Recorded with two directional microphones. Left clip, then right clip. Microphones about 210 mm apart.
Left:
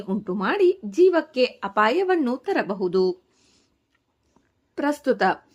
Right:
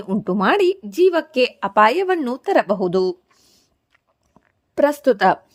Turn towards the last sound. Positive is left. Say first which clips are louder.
# right 6 dB
turn(degrees=-35)  # may be behind; listen again after turning